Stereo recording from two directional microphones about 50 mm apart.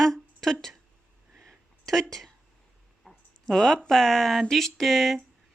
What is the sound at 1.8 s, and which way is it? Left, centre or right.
Speech, centre.